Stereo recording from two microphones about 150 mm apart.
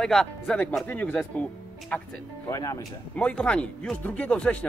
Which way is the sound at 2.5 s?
20° left (ahead or behind).